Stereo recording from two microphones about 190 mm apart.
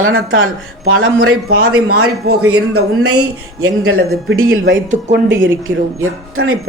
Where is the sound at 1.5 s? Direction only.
55° right (ahead or behind).